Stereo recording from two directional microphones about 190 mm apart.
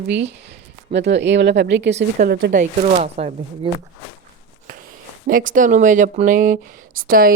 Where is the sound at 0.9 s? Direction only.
65° right (ahead or behind).